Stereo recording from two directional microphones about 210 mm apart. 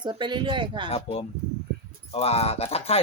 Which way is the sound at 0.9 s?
30° left (ahead or behind).